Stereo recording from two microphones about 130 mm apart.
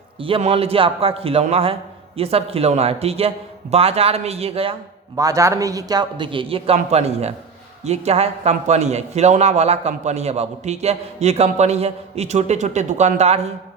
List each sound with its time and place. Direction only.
0.2 s a man's voice: 45° right (ahead or behind)
5.1 s a man's voice: 25° right (ahead or behind); by 13.5 s 55° right (ahead or behind)